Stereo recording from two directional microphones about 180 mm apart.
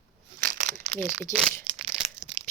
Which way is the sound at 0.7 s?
40° right (ahead or behind).